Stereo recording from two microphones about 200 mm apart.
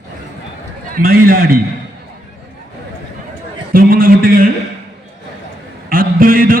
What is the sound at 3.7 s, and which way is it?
Speech, 45° right (ahead or behind).